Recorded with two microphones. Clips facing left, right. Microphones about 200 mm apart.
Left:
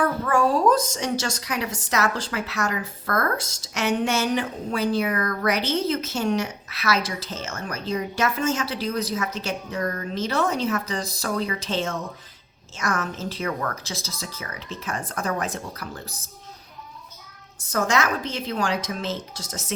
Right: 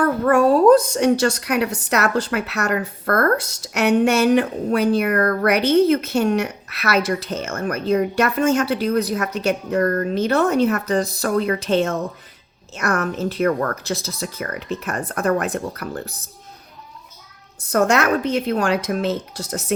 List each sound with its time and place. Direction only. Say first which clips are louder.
0.0 s a woman's voice: right 6 dB; 60° right (ahead or behind)
17.6 s a woman's voice: right 6 dB; 60° right (ahead or behind)